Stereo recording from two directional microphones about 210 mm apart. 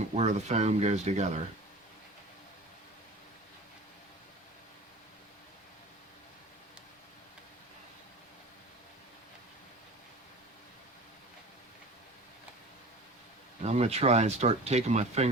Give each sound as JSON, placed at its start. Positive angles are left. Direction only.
{"t": 0.1, "sound": "speech", "side_deg": -30}
{"t": 13.6, "sound": "speech", "side_deg": -30}